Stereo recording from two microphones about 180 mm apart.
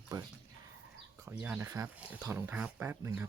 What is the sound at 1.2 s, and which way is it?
Speech, 10° right (ahead or behind).